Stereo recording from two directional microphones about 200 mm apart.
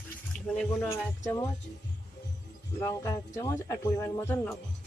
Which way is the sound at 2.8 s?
15° left (ahead or behind).